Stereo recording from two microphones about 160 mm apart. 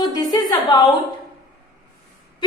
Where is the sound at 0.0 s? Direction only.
25° left (ahead or behind).